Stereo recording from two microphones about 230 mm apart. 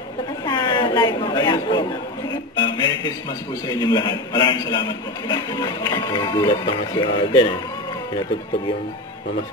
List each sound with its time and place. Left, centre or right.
0.5 s chatter: centre
2.6 s music: centre
3.6 s a man's voice: centre